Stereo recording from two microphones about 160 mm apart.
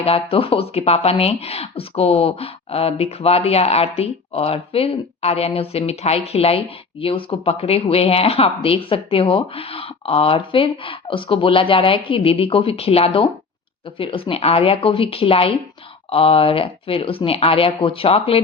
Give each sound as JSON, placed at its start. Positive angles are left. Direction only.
{"t": 0.0, "sound": "speech", "side_deg": 35}